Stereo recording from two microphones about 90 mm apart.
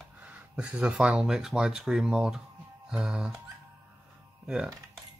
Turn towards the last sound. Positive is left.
turn(degrees=-10)  # may be behind; listen again after turning